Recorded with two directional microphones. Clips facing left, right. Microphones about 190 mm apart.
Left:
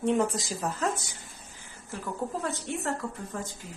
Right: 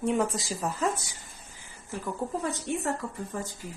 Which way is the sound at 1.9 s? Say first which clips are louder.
Right 1 dB; 15° right (ahead or behind).